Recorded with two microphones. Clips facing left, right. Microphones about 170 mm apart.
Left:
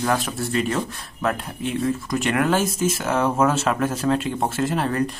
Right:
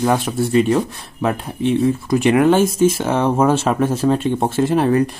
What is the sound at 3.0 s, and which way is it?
Speech, 30° right (ahead or behind).